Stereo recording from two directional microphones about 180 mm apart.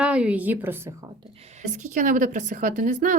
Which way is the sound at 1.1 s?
30° right (ahead or behind).